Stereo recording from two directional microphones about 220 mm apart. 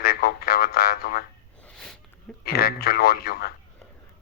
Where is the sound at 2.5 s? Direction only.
45° left (ahead or behind).